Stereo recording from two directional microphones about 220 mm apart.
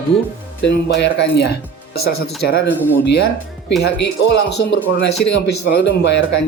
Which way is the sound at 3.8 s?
50° left (ahead or behind).